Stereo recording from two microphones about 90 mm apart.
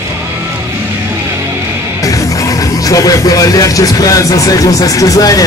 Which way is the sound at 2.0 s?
40° left (ahead or behind).